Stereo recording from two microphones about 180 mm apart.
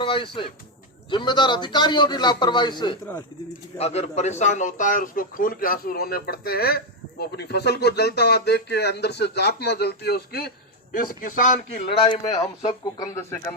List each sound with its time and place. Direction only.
0.0 s a man's voice: 30° left (ahead or behind)
3.8 s a man's voice: 35° left (ahead or behind); by 10.5 s 60° left (ahead or behind)
10.9 s a man's voice: 50° left (ahead or behind)
11.9 s a man's voice: 25° left (ahead or behind)